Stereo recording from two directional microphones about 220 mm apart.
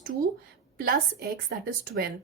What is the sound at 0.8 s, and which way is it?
A woman's voice, 45° right (ahead or behind).